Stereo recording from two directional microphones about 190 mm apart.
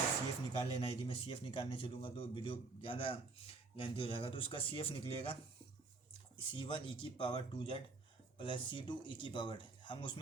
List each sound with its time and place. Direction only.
0.5 s speech: 25° left (ahead or behind)
6.5 s speech: 25° left (ahead or behind)